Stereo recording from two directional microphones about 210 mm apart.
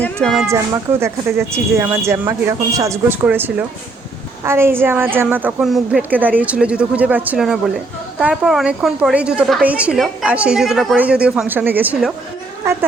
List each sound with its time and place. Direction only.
0.4 s a woman's voice: 10° right (ahead or behind)